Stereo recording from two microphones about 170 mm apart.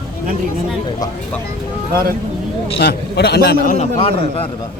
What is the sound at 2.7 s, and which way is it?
Speech, 70° left (ahead or behind).